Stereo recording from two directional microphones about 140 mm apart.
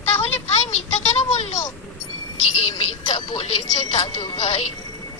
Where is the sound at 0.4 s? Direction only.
45° left (ahead or behind).